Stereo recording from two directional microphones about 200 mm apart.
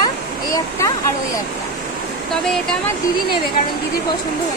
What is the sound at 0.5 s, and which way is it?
Speech, 15° left (ahead or behind).